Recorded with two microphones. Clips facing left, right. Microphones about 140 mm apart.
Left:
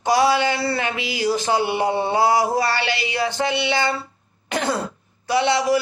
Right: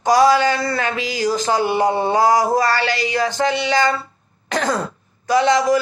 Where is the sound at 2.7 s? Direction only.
20° left (ahead or behind).